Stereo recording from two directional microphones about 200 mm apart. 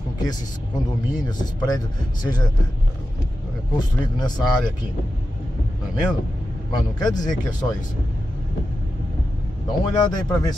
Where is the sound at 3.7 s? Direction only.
20° left (ahead or behind).